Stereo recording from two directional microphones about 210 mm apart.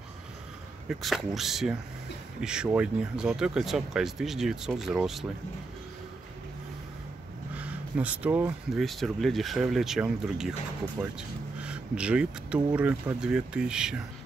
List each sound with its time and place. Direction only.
0.8 s speech: centre (ahead or behind)
7.5 s speech: 5° right (ahead or behind)